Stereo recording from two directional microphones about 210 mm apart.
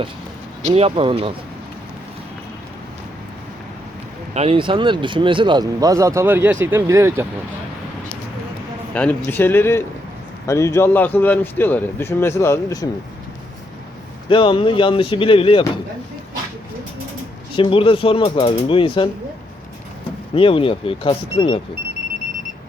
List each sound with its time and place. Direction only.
0.6 s speech: 30° right (ahead or behind)
4.4 s speech: 25° right (ahead or behind)
8.9 s a man's voice: 5° left (ahead or behind)
14.3 s speech: 25° left (ahead or behind)
17.6 s speech: 25° left (ahead or behind)
20.3 s speech: 25° left (ahead or behind)